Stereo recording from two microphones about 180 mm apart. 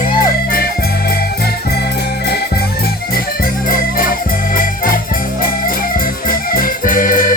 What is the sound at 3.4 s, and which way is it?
Organ, 55° left (ahead or behind).